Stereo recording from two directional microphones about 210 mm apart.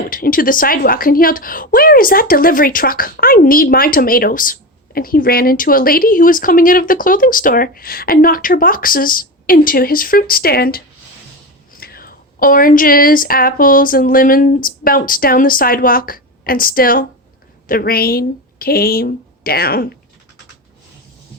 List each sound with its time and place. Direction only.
0.1 s speech: 40° left (ahead or behind)